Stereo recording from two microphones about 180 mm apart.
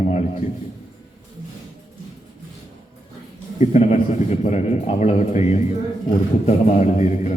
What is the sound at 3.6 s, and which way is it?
A man's voice, 40° left (ahead or behind).